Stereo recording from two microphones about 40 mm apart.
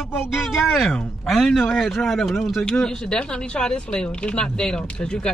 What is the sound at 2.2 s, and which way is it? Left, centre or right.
Speech, centre.